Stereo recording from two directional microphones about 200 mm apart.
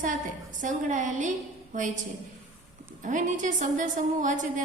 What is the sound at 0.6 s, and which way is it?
A woman's voice, 40° right (ahead or behind).